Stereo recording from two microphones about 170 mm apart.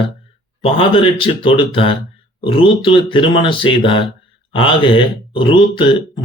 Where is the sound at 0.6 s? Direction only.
30° left (ahead or behind).